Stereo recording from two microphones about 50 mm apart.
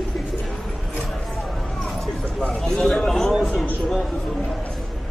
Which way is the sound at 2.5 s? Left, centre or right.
Centre.